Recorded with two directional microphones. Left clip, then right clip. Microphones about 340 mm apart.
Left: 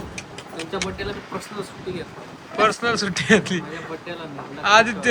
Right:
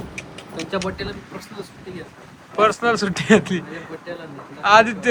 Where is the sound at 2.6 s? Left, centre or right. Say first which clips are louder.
Right 2 dB; centre.